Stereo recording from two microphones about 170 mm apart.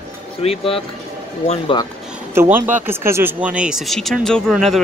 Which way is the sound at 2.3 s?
15° right (ahead or behind).